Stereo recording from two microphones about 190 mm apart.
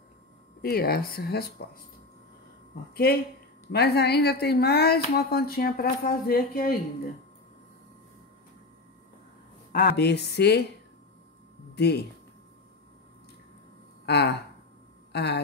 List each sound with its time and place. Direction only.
0.6 s speech: 55° left (ahead or behind)
2.9 s speech: 55° left (ahead or behind)
9.7 s speech: 55° left (ahead or behind)
11.7 s speech: 60° left (ahead or behind)
14.0 s speech: 60° left (ahead or behind)